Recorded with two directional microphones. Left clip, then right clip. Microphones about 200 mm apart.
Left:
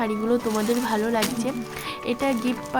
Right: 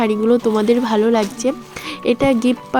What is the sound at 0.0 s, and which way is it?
Speech, 35° right (ahead or behind).